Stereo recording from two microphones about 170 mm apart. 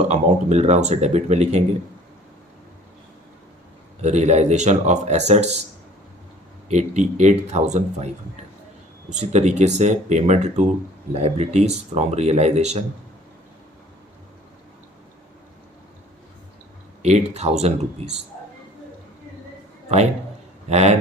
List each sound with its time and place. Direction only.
0.1 s speech: 40° right (ahead or behind)
4.0 s speech: 40° right (ahead or behind)
6.7 s speech: 45° right (ahead or behind)
17.0 s speech: 40° right (ahead or behind)
20.7 s speech: 40° right (ahead or behind)